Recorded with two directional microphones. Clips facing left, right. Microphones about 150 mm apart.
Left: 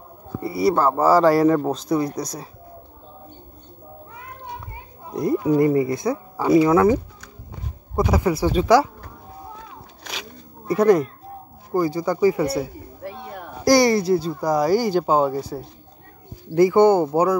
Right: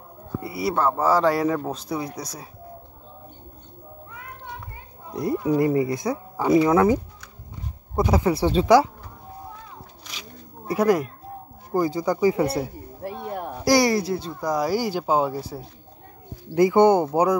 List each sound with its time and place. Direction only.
0.4 s speech: 35° left (ahead or behind)
0.7 s speech: 5° left (ahead or behind)
5.6 s speech: 20° right (ahead or behind)
8.3 s speech: 30° right (ahead or behind)
10.7 s speech: 5° right (ahead or behind)
11.7 s speech: 20° right (ahead or behind)
13.7 s speech: centre (ahead or behind)
16.5 s speech: 20° right (ahead or behind)